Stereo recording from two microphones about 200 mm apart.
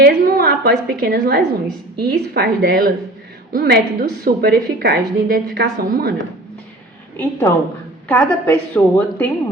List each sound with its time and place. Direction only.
0.0 s a woman's voice: 50° right (ahead or behind)
7.2 s a woman's voice: 10° left (ahead or behind)